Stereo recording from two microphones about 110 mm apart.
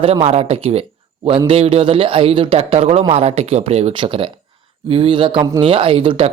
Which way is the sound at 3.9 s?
50° right (ahead or behind).